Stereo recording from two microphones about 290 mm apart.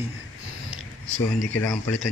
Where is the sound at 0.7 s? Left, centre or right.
Left.